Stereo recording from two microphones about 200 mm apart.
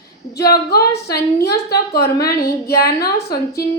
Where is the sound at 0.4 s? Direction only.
50° left (ahead or behind).